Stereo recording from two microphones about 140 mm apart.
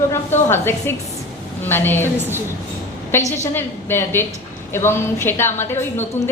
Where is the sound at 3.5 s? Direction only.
15° left (ahead or behind).